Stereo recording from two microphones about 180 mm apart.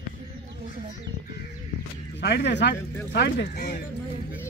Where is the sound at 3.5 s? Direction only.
55° left (ahead or behind).